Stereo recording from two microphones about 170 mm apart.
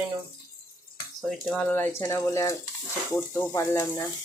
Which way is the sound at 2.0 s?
20° left (ahead or behind).